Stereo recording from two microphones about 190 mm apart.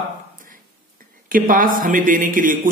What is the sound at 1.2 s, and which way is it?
Speech, 45° right (ahead or behind).